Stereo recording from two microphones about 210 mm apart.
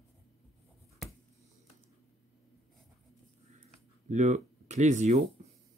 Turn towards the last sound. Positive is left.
turn(degrees=-35)  # may be behind; listen again after turning